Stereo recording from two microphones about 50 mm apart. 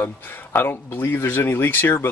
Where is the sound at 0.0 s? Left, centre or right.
Left.